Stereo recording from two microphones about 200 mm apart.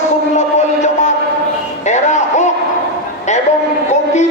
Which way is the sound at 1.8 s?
35° left (ahead or behind).